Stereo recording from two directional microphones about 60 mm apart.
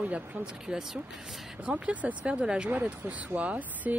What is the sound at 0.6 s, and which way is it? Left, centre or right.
Speech, centre.